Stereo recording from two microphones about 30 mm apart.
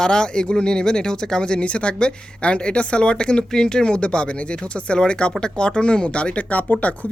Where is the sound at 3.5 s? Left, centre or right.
Left.